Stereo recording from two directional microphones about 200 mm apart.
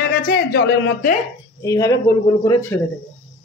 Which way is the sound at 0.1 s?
50° left (ahead or behind).